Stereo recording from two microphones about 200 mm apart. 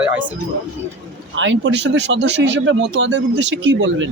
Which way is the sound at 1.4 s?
65° right (ahead or behind).